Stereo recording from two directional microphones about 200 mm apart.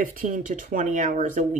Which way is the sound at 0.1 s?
40° right (ahead or behind).